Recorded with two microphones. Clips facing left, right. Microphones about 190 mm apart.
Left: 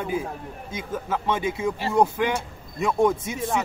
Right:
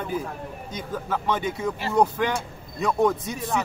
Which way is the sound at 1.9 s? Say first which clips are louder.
Even; 20° left (ahead or behind).